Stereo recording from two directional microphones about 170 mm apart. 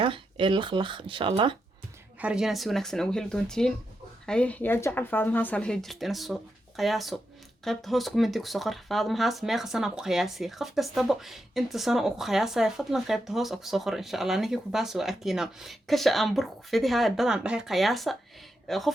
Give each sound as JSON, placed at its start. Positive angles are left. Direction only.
{"t": 0.0, "sound": "speech", "side_deg": -30}
{"t": 2.1, "sound": "speech", "side_deg": -5}